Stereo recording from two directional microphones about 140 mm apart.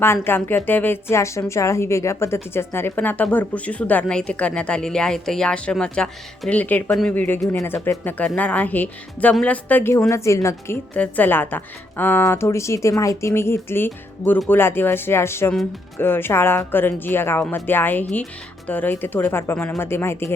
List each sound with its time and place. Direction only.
0.0 s a woman's voice: 15° left (ahead or behind)